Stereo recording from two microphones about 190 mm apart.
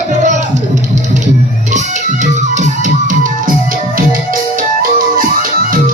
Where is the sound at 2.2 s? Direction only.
40° right (ahead or behind).